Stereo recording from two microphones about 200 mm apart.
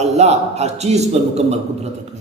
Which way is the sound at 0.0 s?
35° right (ahead or behind).